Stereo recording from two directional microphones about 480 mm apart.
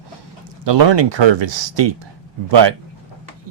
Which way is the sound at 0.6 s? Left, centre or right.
Right.